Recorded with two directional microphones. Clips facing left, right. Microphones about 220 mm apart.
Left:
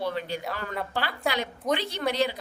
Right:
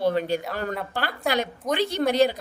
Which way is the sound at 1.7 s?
45° right (ahead or behind).